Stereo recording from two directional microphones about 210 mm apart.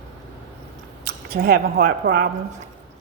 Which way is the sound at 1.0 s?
45° right (ahead or behind).